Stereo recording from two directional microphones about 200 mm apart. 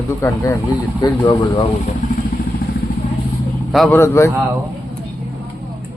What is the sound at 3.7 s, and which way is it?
Speech, centre (ahead or behind).